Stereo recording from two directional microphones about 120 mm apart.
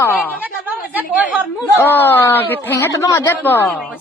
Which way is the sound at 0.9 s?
10° right (ahead or behind).